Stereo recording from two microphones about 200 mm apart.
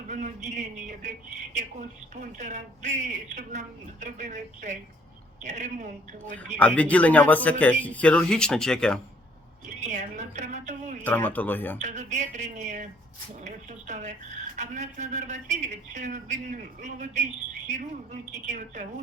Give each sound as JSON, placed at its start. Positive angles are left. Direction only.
{"t": 0.1, "sound": "speech", "side_deg": -40}
{"t": 2.1, "sound": "a woman's voice", "side_deg": -40}
{"t": 6.6, "sound": "speech", "side_deg": 5}
{"t": 9.6, "sound": "a woman's voice", "side_deg": -40}
{"t": 11.0, "sound": "speech", "side_deg": 10}
{"t": 11.8, "sound": "a woman's voice", "side_deg": -35}